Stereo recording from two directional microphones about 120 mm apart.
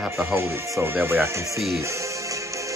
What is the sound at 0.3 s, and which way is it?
Speech, 20° right (ahead or behind).